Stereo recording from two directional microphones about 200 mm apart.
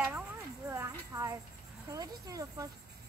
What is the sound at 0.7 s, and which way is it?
Cricket, 15° right (ahead or behind).